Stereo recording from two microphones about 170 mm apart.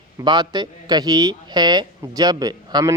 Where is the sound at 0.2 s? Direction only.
25° right (ahead or behind).